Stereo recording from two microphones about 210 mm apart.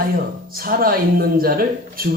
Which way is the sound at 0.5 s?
45° right (ahead or behind).